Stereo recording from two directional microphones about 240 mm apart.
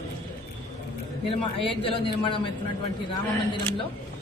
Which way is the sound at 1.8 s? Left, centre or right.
Left.